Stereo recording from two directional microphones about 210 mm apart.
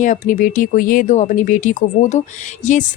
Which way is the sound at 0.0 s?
35° left (ahead or behind).